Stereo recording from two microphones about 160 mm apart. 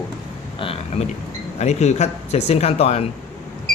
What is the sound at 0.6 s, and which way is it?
Speech, 40° left (ahead or behind).